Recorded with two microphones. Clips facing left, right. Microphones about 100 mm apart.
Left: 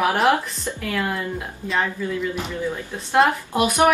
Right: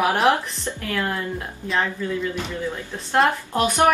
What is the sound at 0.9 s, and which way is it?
Speech, 5° left (ahead or behind).